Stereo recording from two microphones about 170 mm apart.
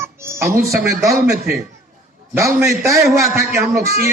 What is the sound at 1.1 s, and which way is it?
Speech, centre (ahead or behind).